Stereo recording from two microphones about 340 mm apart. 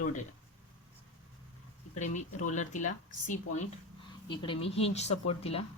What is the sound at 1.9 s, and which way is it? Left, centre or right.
Speech, left.